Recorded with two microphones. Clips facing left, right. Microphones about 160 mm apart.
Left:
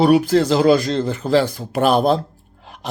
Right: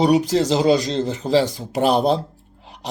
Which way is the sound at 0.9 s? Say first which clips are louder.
Left 2 dB; 25° right (ahead or behind).